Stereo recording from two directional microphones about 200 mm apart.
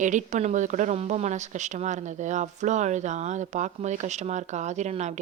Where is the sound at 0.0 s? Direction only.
40° right (ahead or behind).